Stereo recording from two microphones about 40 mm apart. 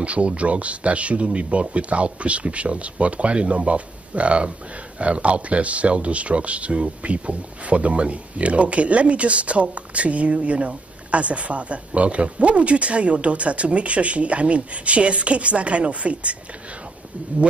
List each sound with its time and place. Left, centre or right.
0.0 s speech: right